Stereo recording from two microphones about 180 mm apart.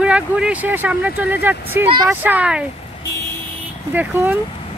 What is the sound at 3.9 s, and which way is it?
Speech, 10° right (ahead or behind).